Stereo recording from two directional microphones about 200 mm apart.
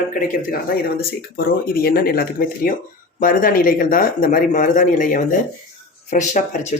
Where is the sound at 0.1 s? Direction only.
45° left (ahead or behind).